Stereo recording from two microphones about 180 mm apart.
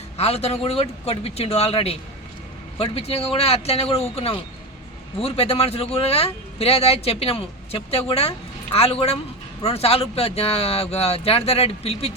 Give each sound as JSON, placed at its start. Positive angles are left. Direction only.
{"t": 0.2, "sound": "a man's voice", "side_deg": 35}